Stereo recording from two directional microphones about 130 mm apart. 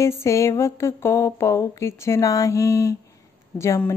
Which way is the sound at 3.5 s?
20° left (ahead or behind).